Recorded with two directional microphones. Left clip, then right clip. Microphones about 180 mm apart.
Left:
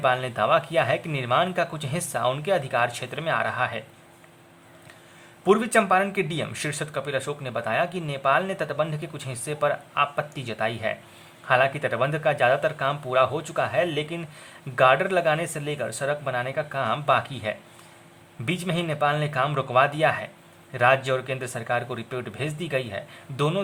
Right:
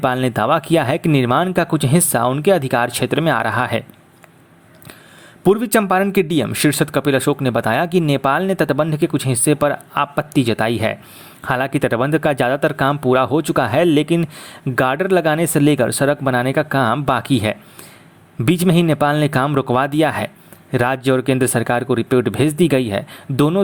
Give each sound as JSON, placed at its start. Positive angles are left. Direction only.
{"t": 0.0, "sound": "speech", "side_deg": -45}
{"t": 5.5, "sound": "speech", "side_deg": -45}